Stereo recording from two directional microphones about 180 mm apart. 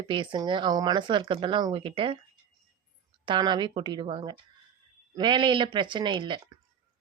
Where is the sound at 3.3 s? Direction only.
25° right (ahead or behind).